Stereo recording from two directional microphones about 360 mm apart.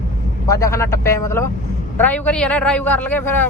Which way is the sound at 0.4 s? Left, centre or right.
Centre.